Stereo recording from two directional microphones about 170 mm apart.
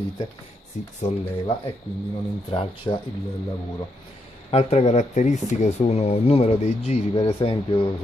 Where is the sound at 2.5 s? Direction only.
35° left (ahead or behind).